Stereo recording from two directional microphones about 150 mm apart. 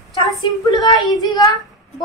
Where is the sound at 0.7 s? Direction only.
25° left (ahead or behind).